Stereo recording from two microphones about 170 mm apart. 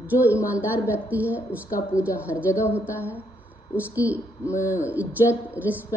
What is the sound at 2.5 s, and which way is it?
Speech, 15° left (ahead or behind).